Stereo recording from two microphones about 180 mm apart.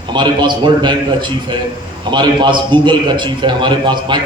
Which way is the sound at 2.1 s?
25° right (ahead or behind).